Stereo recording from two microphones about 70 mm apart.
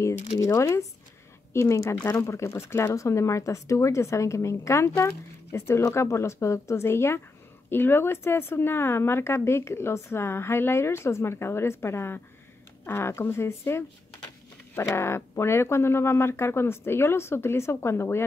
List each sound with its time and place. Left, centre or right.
0.0 s speech: left
15.0 s speech: left